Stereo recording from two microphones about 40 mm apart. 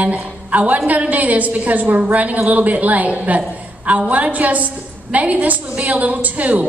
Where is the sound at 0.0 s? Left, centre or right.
Right.